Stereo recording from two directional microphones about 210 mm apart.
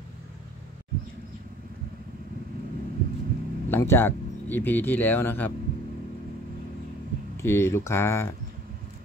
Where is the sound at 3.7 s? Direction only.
10° left (ahead or behind).